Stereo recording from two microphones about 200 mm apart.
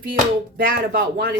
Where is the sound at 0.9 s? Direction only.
50° right (ahead or behind).